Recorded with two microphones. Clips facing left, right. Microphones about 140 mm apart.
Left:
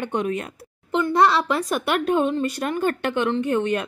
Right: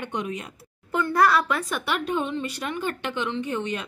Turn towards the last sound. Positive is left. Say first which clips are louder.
# left 6 dB
turn(degrees=55)  # may be behind; listen again after turning